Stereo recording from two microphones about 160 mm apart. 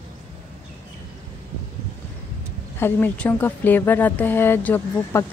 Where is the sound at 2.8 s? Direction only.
15° left (ahead or behind).